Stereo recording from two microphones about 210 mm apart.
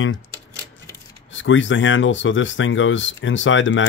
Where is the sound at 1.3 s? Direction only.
65° left (ahead or behind).